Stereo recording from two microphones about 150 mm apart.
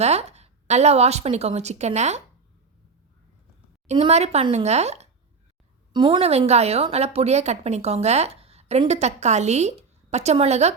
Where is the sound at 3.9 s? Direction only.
45° right (ahead or behind).